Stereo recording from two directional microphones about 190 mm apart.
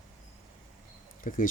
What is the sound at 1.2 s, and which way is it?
Speech, 45° left (ahead or behind).